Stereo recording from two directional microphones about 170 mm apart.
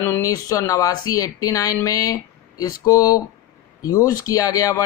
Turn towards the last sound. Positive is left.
turn(degrees=20)  # may be behind; listen again after turning